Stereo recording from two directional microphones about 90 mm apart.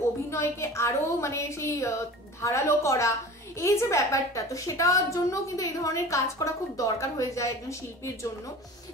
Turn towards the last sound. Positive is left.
turn(degrees=35)  # may be behind; listen again after turning